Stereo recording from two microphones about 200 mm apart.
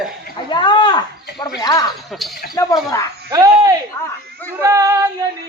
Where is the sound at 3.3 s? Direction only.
15° right (ahead or behind).